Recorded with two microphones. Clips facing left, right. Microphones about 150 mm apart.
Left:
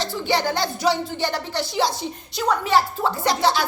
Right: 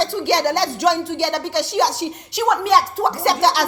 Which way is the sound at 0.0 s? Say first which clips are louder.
Right 4 dB; 70° right (ahead or behind).